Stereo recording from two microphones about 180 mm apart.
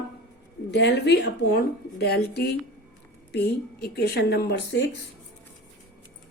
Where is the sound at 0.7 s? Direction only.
70° left (ahead or behind).